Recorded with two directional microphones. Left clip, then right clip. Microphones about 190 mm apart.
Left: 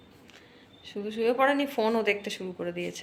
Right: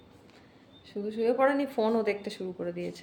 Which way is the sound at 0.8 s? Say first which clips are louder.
Left 1 dB; 10° right (ahead or behind).